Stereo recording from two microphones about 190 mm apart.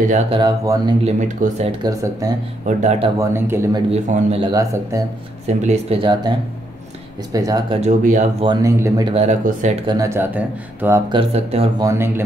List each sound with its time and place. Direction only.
0.3 s a man's voice: 20° right (ahead or behind)
1.0 s speech: 35° right (ahead or behind)
1.8 s speech: 15° right (ahead or behind)
2.6 s speech: 35° right (ahead or behind)
3.2 s speech: 10° right (ahead or behind)
3.9 s a man's voice: 35° right (ahead or behind)
5.5 s speech: 35° right (ahead or behind)
7.3 s a man's voice: 20° right (ahead or behind)
7.7 s speech: 40° right (ahead or behind)
8.6 s speech: 15° right (ahead or behind)
9.1 s speech: 35° right (ahead or behind)
9.8 s speech: 15° right (ahead or behind)
11.1 s a man's voice: 30° right (ahead or behind)
11.8 s speech: 15° right (ahead or behind)